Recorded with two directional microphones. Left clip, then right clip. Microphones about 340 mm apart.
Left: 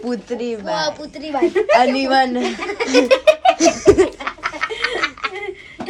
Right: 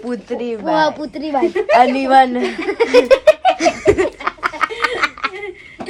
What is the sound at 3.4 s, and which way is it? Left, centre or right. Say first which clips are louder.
Laughter: left 1 dB; centre.